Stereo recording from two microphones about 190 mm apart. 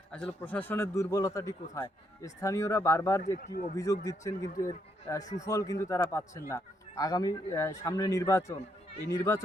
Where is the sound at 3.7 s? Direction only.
15° left (ahead or behind).